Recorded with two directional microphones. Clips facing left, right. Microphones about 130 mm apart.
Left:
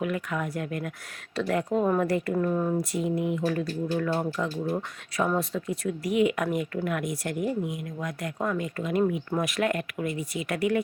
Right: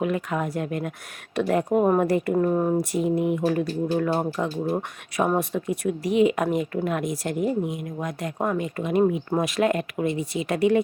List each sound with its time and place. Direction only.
0.0 s speech: 25° right (ahead or behind)